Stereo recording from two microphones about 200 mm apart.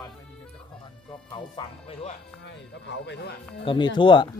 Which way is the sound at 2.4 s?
65° left (ahead or behind).